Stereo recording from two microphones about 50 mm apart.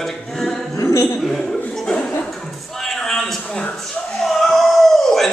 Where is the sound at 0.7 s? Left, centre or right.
Left.